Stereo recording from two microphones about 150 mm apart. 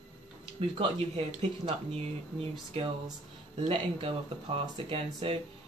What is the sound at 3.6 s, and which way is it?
Speech, 40° right (ahead or behind).